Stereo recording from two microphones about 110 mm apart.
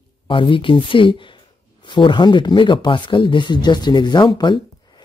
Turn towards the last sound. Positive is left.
turn(degrees=45)  # may be behind; listen again after turning